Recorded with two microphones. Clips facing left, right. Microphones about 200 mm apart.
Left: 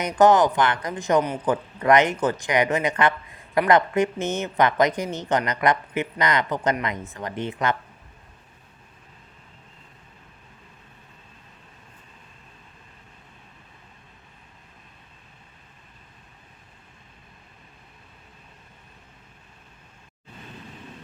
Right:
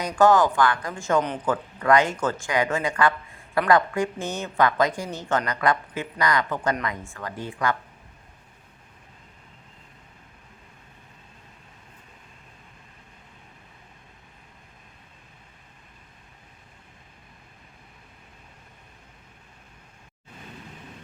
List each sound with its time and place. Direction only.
0.0 s speech: 20° left (ahead or behind)